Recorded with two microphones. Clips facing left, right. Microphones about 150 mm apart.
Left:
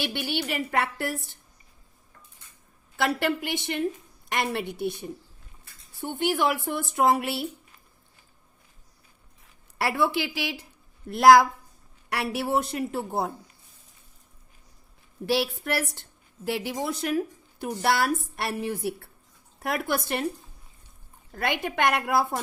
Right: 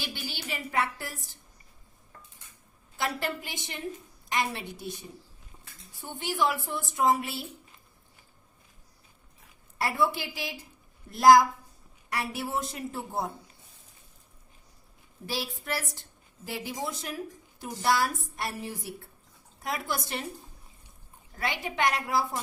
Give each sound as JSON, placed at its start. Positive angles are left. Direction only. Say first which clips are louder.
{"t": 0.0, "sound": "a woman's voice", "louder": "left 9 dB", "side_deg": 65}
{"t": 3.0, "sound": "a woman's voice", "louder": "left 6 dB", "side_deg": 70}
{"t": 9.7, "sound": "a woman's voice", "louder": "left 3 dB", "side_deg": 70}
{"t": 15.3, "sound": "a woman's voice", "louder": "left 8 dB", "side_deg": 70}
{"t": 21.3, "sound": "a woman's voice", "louder": "left 4 dB", "side_deg": 60}